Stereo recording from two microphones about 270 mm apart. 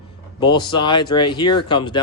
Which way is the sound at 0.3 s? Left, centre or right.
Centre.